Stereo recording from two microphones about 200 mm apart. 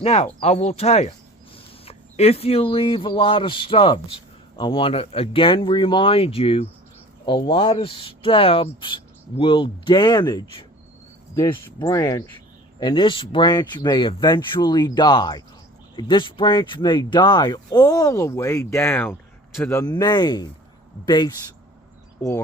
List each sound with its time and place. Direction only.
0.0 s speech: 30° left (ahead or behind)